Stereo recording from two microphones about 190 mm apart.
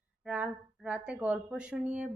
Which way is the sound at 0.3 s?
5° right (ahead or behind).